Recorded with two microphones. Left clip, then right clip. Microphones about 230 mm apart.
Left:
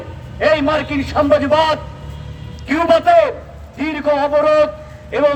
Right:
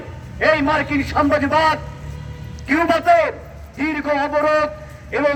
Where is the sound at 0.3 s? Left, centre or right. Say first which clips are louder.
Left 2 dB; left.